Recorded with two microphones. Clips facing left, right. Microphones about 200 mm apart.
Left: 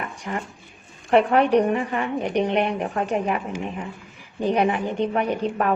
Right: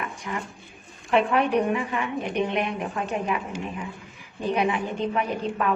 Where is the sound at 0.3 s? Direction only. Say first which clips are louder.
Left 3 dB; 45° left (ahead or behind).